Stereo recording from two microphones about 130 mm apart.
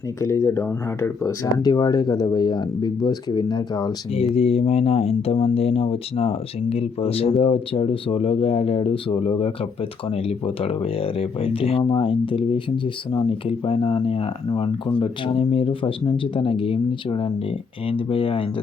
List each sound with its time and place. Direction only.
0.2 s speech: 25° left (ahead or behind)
4.4 s speech: 50° left (ahead or behind)